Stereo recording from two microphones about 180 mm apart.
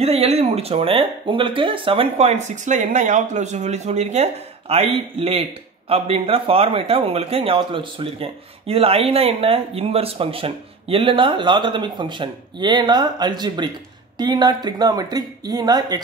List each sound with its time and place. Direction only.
0.0 s speech: 35° right (ahead or behind)